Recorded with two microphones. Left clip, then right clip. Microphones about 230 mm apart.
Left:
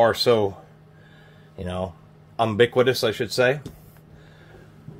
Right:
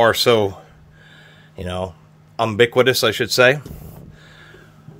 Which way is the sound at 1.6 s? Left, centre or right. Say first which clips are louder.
Right 4 dB; right.